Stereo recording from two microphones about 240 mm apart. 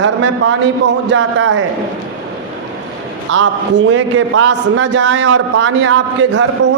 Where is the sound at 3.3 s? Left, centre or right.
Right.